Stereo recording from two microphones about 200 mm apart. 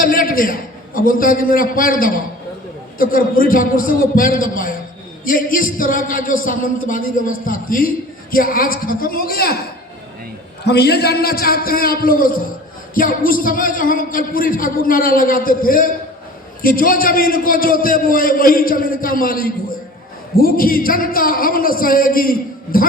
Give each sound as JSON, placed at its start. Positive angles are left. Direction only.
{"t": 0.0, "sound": "a sound", "side_deg": 45}
{"t": 1.0, "sound": "a man's voice", "side_deg": 45}
{"t": 10.7, "sound": "a man's voice", "side_deg": 55}